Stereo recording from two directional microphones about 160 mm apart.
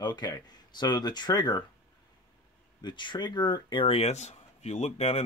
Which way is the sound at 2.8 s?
30° left (ahead or behind).